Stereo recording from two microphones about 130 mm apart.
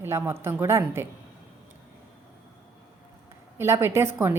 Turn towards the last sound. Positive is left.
turn(degrees=-20)  # may be behind; listen again after turning